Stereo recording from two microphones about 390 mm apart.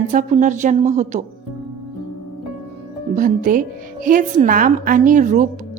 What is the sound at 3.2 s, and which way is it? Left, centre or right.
A woman's voice, centre.